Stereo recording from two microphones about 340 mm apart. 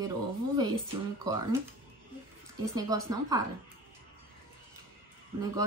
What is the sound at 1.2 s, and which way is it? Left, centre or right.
Speech, centre.